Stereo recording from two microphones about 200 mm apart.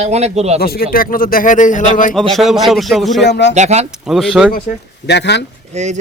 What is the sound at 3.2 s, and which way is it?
Speech, 60° left (ahead or behind).